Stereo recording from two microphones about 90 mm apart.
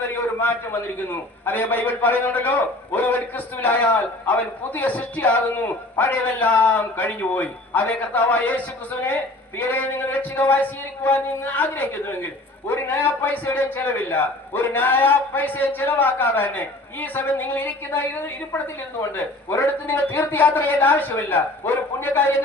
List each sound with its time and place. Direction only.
0.1 s a man's voice: 25° left (ahead or behind)